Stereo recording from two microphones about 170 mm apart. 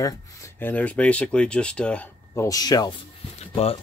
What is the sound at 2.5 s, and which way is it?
Speech, 20° left (ahead or behind).